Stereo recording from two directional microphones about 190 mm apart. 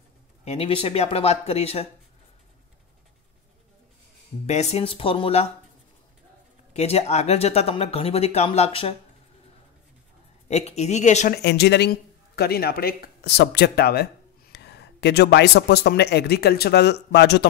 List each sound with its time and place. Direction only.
0.5 s speech: 30° left (ahead or behind)
4.5 s speech: 35° left (ahead or behind)
6.7 s speech: 35° left (ahead or behind)
10.5 s speech: 35° left (ahead or behind)
11.4 s speech: 60° left (ahead or behind)